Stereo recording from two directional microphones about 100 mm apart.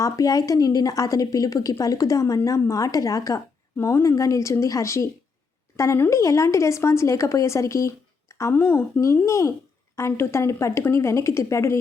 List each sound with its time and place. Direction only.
0.0 s a woman's voice: 35° left (ahead or behind)